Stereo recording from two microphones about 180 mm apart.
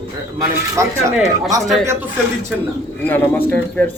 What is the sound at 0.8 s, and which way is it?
Speech, 15° right (ahead or behind).